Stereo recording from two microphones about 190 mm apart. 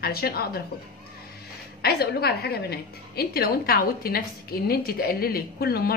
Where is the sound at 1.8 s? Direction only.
55° left (ahead or behind).